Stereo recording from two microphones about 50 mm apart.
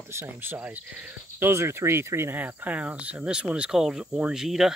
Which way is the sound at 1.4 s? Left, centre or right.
Right.